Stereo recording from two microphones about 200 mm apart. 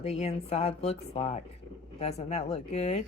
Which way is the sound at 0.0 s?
30° left (ahead or behind).